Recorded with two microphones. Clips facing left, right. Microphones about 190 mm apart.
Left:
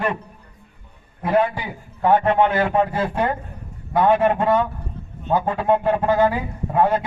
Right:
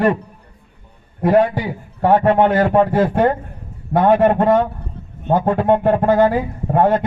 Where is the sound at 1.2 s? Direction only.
45° right (ahead or behind).